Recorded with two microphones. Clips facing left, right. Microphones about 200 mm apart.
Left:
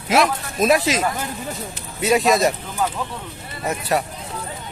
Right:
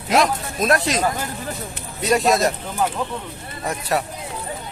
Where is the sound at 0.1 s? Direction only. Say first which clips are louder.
Even; centre (ahead or behind).